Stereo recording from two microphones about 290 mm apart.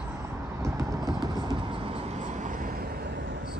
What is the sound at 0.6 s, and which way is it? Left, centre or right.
Vehicle, centre.